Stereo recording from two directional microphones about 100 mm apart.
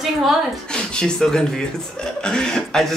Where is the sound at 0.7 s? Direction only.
10° left (ahead or behind).